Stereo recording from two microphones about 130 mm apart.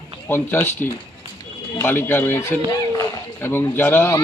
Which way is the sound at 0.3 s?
15° left (ahead or behind).